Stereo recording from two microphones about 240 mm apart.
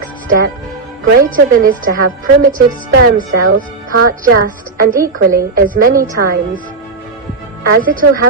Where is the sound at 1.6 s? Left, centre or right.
Right.